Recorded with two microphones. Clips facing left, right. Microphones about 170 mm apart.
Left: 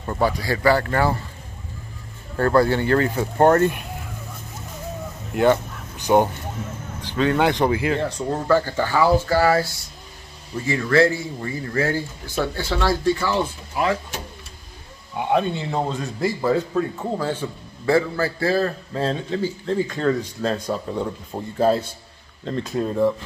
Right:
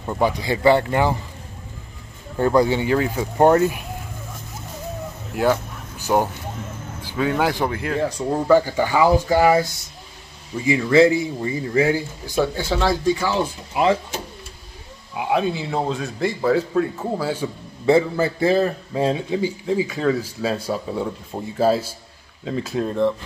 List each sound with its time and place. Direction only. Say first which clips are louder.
0.0 s speech: right 1 dB; 15° right (ahead or behind)
2.3 s a man's voice: even; 15° right (ahead or behind)
5.3 s speech: left 2 dB; 5° right (ahead or behind)
8.0 s a man's voice: right 2 dB; 10° right (ahead or behind)
15.1 s a man's voice: even; 5° right (ahead or behind)
17.8 s a man's voice: right 3 dB; 20° right (ahead or behind); by 23.1 s 5° left (ahead or behind)